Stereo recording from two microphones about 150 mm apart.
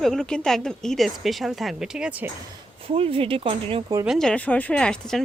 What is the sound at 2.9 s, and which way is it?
Speech, 40° right (ahead or behind).